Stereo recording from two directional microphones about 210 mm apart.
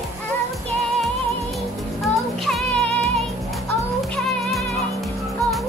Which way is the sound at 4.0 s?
Centre (ahead or behind).